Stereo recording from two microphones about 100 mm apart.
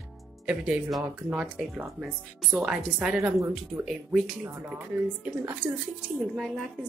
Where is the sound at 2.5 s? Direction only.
15° right (ahead or behind).